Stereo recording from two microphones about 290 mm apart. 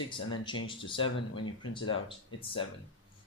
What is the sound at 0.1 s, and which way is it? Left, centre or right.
Speech, centre.